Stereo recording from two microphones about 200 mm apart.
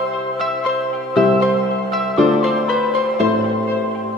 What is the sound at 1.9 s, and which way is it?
Music, centre (ahead or behind).